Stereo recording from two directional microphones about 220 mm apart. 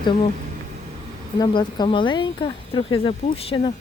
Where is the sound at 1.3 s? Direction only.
20° left (ahead or behind).